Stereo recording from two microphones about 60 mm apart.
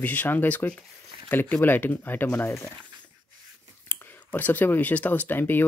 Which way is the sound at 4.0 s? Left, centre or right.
Left.